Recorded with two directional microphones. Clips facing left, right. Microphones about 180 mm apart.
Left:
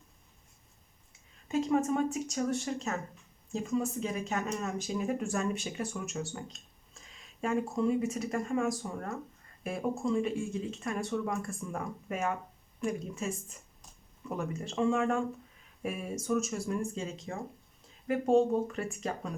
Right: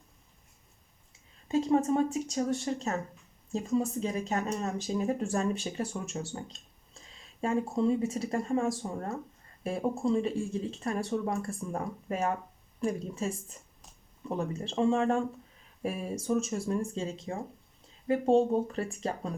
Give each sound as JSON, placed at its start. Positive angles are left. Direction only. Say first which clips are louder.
{"t": 1.5, "sound": "speech", "louder": "right 2 dB", "side_deg": -30}
{"t": 7.4, "sound": "speech", "louder": "right 2 dB", "side_deg": -30}